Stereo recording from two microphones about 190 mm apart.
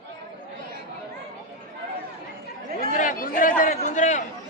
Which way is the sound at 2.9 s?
45° left (ahead or behind).